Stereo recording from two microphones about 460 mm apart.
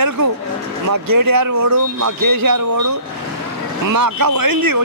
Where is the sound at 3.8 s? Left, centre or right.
Right.